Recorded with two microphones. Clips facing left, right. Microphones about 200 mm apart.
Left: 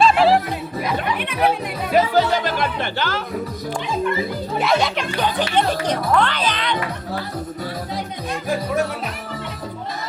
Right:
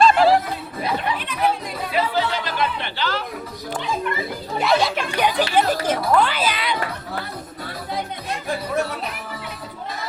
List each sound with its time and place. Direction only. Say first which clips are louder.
0.0 s music: even; centre (ahead or behind)
1.2 s speech: left 3 dB; 60° left (ahead or behind)
2.0 s music: left 6 dB; 45° left (ahead or behind)
4.6 s a child's voice: right 1 dB; centre (ahead or behind)